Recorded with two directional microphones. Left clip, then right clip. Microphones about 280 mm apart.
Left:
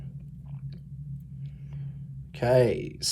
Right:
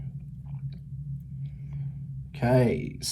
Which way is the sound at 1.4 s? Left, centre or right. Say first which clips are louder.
Right 2 dB; centre.